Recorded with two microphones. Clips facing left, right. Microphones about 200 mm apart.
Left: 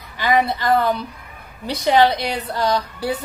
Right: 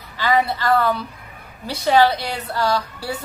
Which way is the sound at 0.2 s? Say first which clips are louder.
Left 1 dB; 15° left (ahead or behind).